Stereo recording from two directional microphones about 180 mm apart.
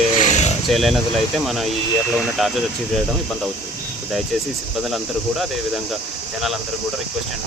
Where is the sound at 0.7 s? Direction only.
Centre (ahead or behind).